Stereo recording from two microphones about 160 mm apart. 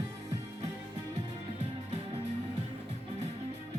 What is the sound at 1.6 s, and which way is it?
Music, 40° right (ahead or behind).